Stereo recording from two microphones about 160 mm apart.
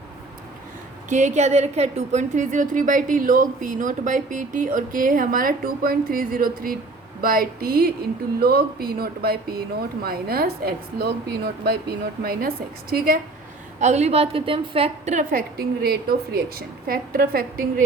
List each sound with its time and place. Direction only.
1.1 s speech: 45° right (ahead or behind); by 13.1 s 70° right (ahead or behind)
13.7 s speech: 45° right (ahead or behind); by 17.8 s 65° right (ahead or behind)